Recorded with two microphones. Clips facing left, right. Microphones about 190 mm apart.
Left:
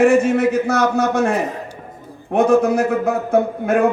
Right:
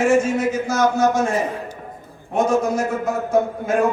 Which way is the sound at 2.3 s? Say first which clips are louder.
Left 5 dB; 60° left (ahead or behind).